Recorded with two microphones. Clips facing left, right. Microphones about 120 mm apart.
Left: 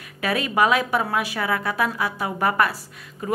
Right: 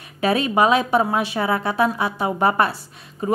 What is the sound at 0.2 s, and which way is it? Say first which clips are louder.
A woman's voice: right 3 dB; 25° right (ahead or behind).